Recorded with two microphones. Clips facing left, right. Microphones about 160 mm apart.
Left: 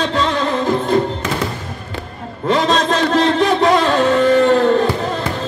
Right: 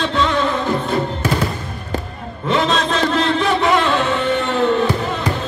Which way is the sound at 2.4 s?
40° left (ahead or behind).